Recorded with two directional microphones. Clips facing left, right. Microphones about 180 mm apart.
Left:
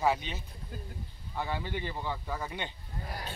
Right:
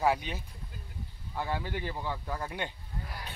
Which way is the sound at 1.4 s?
5° right (ahead or behind).